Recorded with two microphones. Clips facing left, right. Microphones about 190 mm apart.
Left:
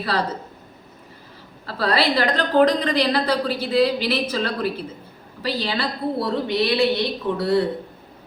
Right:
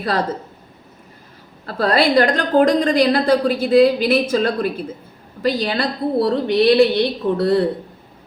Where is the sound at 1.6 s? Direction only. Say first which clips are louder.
Right 4 dB; 50° right (ahead or behind).